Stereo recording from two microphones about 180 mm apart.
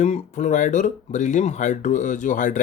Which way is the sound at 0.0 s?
40° left (ahead or behind).